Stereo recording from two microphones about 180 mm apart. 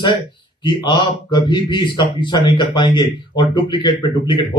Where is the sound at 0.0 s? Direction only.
25° left (ahead or behind).